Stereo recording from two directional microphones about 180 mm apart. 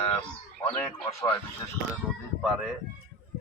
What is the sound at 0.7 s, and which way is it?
Speech, 15° left (ahead or behind).